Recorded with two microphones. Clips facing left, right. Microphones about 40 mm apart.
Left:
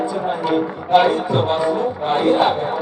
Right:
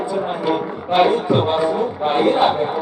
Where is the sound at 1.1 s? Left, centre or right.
Centre.